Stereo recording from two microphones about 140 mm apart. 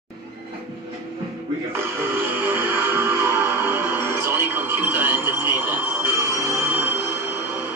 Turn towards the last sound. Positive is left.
turn(degrees=-15)  # may be behind; listen again after turning